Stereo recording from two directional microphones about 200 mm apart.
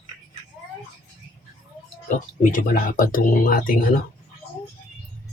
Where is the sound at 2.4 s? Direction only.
45° left (ahead or behind).